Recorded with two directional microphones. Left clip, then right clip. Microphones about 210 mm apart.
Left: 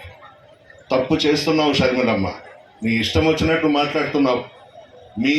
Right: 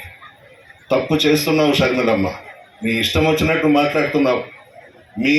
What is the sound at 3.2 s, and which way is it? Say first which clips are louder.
A man's voice: right 2 dB; 55° right (ahead or behind).